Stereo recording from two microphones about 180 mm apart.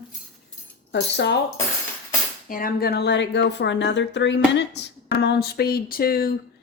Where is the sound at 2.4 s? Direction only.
50° left (ahead or behind).